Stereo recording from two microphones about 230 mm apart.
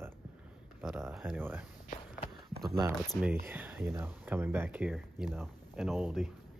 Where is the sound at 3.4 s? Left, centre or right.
Centre.